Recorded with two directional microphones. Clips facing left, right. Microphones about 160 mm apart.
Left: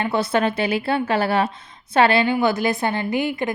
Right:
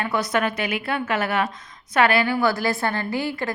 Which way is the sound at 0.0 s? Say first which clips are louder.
Left 3 dB; 25° left (ahead or behind).